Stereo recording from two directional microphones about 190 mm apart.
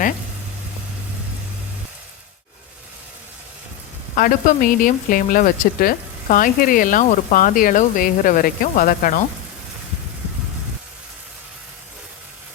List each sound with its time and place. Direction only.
4.1 s speech: 45° left (ahead or behind)